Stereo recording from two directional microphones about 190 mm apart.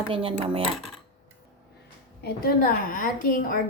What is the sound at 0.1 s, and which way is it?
Speech, 30° right (ahead or behind).